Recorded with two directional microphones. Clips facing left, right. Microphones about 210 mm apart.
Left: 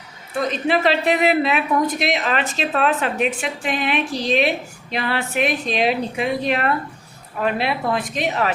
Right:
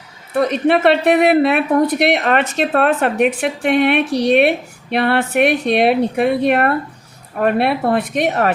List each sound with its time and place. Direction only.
0.3 s a woman's voice: 60° right (ahead or behind)